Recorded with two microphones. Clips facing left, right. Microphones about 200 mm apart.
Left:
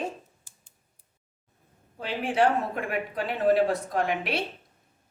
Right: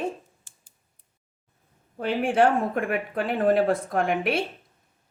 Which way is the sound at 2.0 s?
50° right (ahead or behind).